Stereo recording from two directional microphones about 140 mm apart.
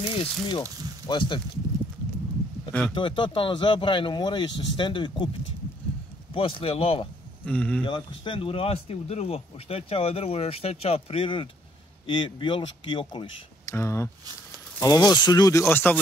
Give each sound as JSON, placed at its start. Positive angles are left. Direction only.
{"t": 0.2, "sound": "speech", "side_deg": 35}
{"t": 2.9, "sound": "speech", "side_deg": 35}
{"t": 6.3, "sound": "speech", "side_deg": 40}
{"t": 7.4, "sound": "speech", "side_deg": 10}
{"t": 7.8, "sound": "speech", "side_deg": 35}
{"t": 13.7, "sound": "speech", "side_deg": 20}